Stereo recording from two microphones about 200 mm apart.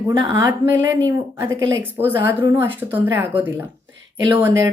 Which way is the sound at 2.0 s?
10° right (ahead or behind).